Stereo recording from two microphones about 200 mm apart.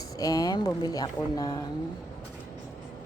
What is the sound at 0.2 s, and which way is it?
Speech, 20° left (ahead or behind).